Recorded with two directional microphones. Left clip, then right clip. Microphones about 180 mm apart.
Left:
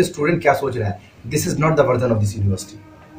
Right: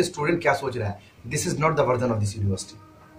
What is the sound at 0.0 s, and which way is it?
Speech, centre (ahead or behind).